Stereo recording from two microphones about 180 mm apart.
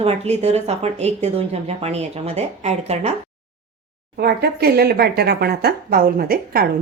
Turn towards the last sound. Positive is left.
turn(degrees=-55)  # may be behind; listen again after turning